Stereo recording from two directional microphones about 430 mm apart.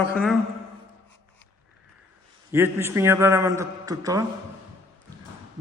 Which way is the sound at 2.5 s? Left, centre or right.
Centre.